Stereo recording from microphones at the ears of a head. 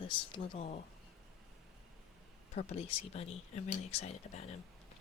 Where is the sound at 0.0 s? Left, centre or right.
Left.